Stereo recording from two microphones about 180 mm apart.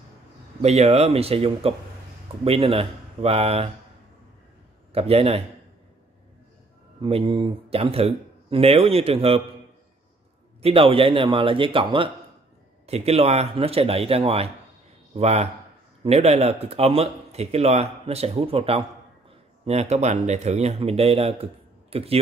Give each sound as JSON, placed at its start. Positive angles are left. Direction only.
{"t": 0.6, "sound": "a man's voice", "side_deg": -35}
{"t": 4.9, "sound": "a man's voice", "side_deg": -35}
{"t": 7.0, "sound": "a man's voice", "side_deg": -30}
{"t": 10.6, "sound": "a man's voice", "side_deg": -30}